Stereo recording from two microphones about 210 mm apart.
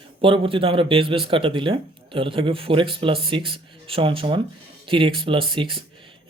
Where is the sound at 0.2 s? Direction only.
25° right (ahead or behind).